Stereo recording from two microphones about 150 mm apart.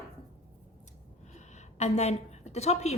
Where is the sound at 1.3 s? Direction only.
50° left (ahead or behind).